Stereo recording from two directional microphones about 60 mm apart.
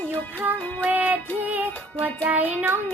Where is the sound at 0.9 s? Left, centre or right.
Right.